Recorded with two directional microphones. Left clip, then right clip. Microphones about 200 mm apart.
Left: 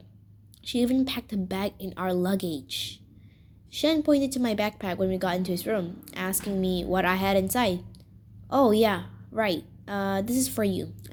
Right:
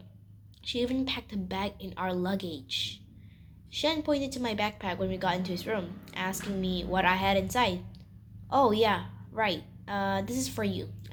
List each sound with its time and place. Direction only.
0.7 s a woman's voice: 50° left (ahead or behind)
3.8 s a woman's voice: 50° left (ahead or behind)